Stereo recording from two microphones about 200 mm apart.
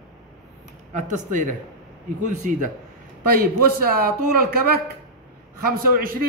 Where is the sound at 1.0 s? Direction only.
40° right (ahead or behind).